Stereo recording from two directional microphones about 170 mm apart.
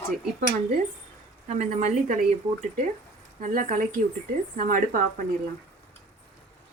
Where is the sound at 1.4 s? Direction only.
40° right (ahead or behind).